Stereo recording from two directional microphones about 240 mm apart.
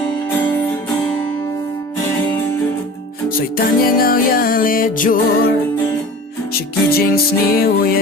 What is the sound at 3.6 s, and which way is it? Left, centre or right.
Music, left.